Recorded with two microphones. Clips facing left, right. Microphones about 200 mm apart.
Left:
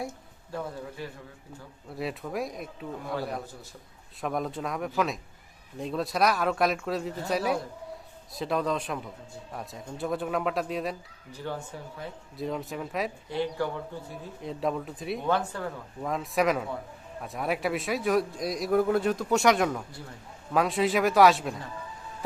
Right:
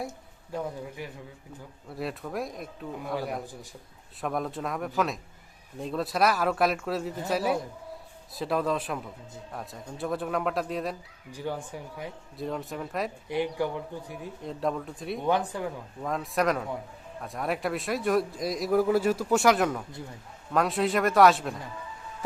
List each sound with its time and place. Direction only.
0.5 s speech: 15° right (ahead or behind)
1.9 s a man's voice: centre (ahead or behind)
3.2 s speech: 15° right (ahead or behind)
4.2 s a man's voice: centre (ahead or behind)
11.3 s speech: 15° right (ahead or behind)
12.4 s a man's voice: centre (ahead or behind)
13.2 s speech: 15° right (ahead or behind)
14.4 s a man's voice: centre (ahead or behind)
15.3 s speech: 15° right (ahead or behind)
16.0 s a man's voice: centre (ahead or behind)